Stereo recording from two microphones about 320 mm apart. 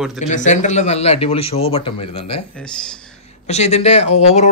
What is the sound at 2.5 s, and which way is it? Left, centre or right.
Speech, centre.